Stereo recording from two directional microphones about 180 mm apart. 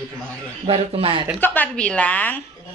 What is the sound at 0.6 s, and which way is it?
Speech, 30° right (ahead or behind).